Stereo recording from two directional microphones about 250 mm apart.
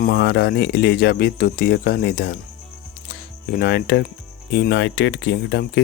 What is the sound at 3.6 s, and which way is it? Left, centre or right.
Speech, left.